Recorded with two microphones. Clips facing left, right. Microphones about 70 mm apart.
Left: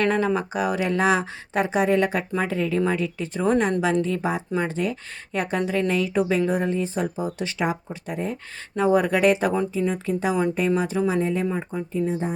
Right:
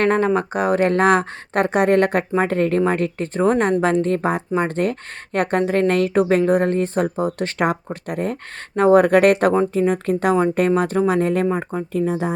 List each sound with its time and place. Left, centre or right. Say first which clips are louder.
0.0 s speech: right 4 dB; right
11.9 s speech: right 4 dB; right